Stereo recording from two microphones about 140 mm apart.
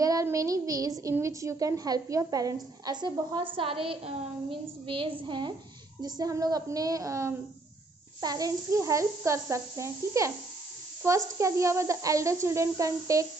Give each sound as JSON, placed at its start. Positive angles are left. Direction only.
{"t": 0.0, "sound": "a woman's voice", "side_deg": -25}